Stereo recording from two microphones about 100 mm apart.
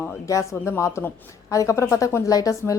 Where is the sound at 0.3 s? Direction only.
30° left (ahead or behind).